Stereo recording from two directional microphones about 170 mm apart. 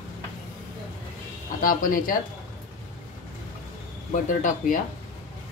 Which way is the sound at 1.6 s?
55° left (ahead or behind).